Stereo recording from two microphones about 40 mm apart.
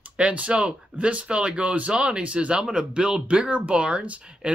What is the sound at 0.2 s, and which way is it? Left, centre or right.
Speech, right.